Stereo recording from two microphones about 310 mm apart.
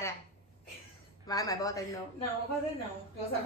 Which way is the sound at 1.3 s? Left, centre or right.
Centre.